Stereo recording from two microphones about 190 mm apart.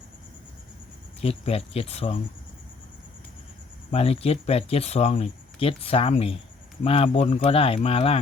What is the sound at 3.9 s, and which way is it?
Speech, 30° left (ahead or behind).